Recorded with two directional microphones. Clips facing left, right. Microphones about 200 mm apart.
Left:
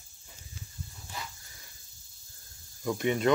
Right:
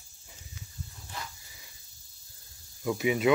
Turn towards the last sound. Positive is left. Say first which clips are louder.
# right 1 dB
turn(degrees=-5)  # may be behind; listen again after turning